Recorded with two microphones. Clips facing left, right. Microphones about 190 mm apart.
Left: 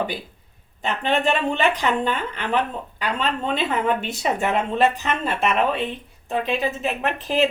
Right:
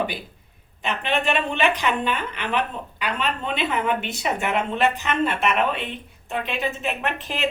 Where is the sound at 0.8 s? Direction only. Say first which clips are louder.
Left 3 dB; 40° left (ahead or behind).